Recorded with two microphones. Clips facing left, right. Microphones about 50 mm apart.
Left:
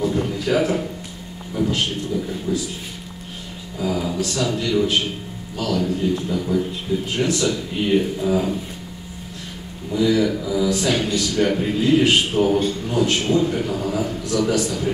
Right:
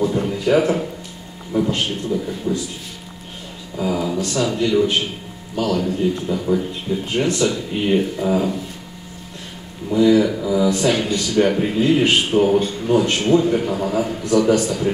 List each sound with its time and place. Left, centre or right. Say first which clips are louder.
0.0 s a sound: right 2 dB; centre
1.5 s a man's voice: right 3 dB; centre
2.1 s speech: right 3 dB; centre
3.8 s a sound: right 2 dB; centre
4.3 s a man's voice: right 4 dB; centre
9.8 s a man's voice: right 4 dB; centre